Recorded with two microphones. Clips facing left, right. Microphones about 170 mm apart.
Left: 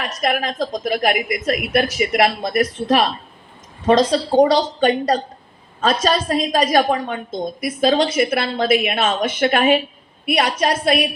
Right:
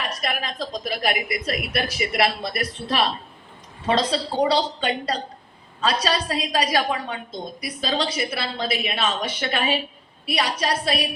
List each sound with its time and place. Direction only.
0.2 s a woman's voice: 50° left (ahead or behind)